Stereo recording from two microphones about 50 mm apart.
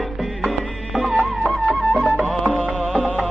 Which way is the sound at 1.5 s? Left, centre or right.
Left.